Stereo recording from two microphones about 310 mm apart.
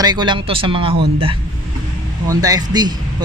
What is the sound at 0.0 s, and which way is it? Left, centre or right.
Speech, centre.